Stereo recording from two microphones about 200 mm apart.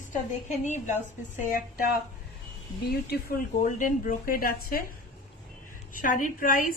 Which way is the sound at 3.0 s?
50° left (ahead or behind).